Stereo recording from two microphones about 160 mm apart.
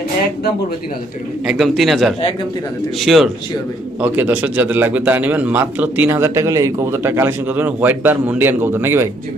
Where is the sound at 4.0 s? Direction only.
10° right (ahead or behind).